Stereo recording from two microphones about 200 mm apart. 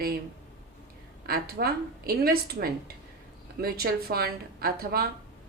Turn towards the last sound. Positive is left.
turn(degrees=-50)  # may be behind; listen again after turning